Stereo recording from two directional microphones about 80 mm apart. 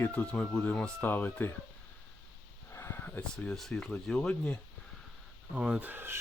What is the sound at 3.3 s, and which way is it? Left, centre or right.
Speech, centre.